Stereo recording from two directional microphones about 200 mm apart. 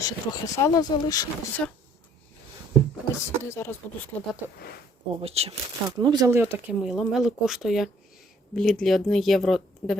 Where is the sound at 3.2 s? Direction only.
15° left (ahead or behind).